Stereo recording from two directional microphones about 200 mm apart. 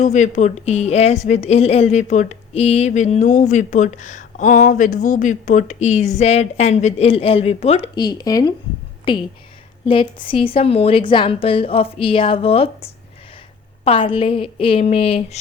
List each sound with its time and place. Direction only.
0.0 s a woman's voice: 35° left (ahead or behind)
7.9 s a woman's voice: 20° left (ahead or behind)